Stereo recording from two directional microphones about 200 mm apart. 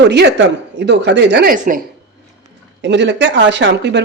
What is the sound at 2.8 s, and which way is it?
Speech, 60° right (ahead or behind).